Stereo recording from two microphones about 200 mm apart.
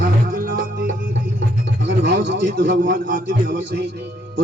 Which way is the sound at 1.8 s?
65° right (ahead or behind).